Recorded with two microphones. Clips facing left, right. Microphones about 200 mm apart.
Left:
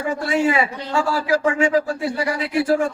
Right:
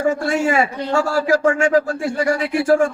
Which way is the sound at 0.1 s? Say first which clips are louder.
Right 1 dB; 45° right (ahead or behind).